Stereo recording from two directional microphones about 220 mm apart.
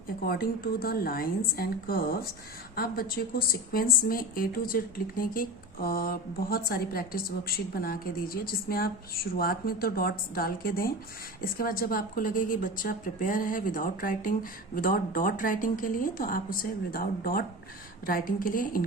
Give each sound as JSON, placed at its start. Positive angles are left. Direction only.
{"t": 0.2, "sound": "a woman's voice", "side_deg": 40}